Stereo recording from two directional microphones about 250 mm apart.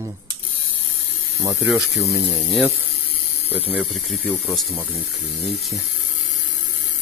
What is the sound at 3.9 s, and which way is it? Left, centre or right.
Speech, centre.